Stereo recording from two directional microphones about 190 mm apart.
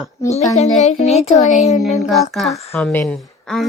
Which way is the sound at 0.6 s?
35° left (ahead or behind).